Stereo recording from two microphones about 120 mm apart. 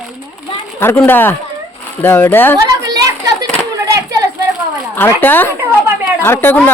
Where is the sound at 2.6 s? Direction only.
30° right (ahead or behind).